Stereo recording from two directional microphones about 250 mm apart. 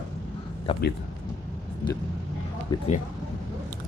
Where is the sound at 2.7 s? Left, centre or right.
Centre.